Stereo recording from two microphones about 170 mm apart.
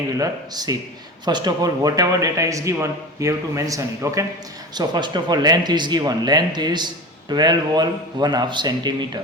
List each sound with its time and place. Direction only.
0.2 s speech: 20° right (ahead or behind)